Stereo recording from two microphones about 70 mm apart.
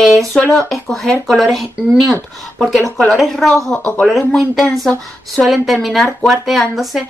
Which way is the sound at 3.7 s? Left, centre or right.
Centre.